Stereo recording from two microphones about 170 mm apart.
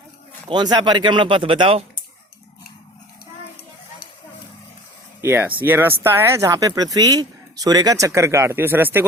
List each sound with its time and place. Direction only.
0.4 s speech: 25° right (ahead or behind)
5.2 s speech: 15° right (ahead or behind)